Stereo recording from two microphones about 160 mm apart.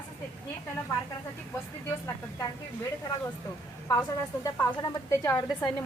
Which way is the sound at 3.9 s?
20° left (ahead or behind).